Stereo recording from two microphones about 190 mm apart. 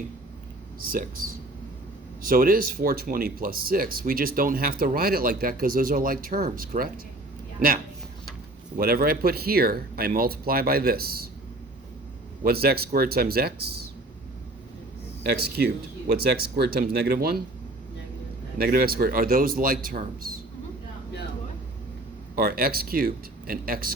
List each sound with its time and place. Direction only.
0.9 s speech: 50° right (ahead or behind)
8.8 s speech: 50° right (ahead or behind)
12.4 s speech: 55° right (ahead or behind)
15.4 s speech: 55° right (ahead or behind)
18.5 s speech: 50° right (ahead or behind)
22.4 s speech: 50° right (ahead or behind)